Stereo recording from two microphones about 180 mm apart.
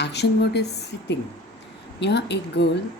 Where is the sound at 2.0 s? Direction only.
70° left (ahead or behind).